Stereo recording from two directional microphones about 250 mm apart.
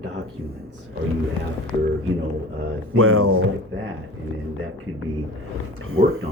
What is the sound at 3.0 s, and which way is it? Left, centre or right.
Speech, right.